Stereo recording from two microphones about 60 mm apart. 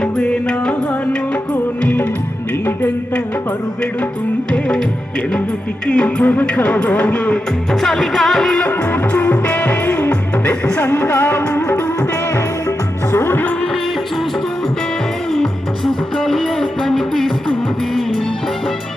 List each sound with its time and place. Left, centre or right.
0.0 s music: centre
5.9 s music: centre
6.4 s a man's voice: left
7.7 s music: centre
8.9 s music: left
10.8 s music: left
13.1 s music: left
15.3 s music: centre